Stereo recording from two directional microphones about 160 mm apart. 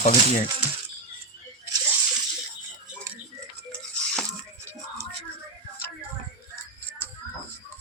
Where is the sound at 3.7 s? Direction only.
5° left (ahead or behind).